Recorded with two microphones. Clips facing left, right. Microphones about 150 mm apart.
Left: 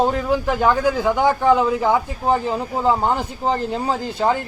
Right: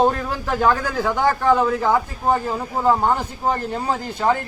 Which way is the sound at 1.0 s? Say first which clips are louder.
Even; 15° left (ahead or behind).